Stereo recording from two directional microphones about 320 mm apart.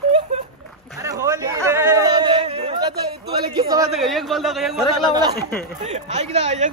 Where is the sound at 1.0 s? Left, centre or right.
Centre.